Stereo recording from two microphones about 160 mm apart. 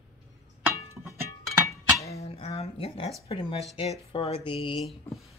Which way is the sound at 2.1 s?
40° left (ahead or behind).